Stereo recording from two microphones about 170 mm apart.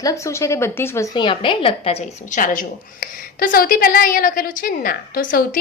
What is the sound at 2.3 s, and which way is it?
A woman's voice, 50° left (ahead or behind).